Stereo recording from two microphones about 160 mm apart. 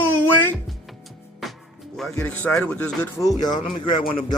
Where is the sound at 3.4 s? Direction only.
30° left (ahead or behind).